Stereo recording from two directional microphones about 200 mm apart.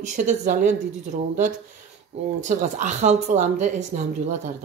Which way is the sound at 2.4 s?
40° right (ahead or behind).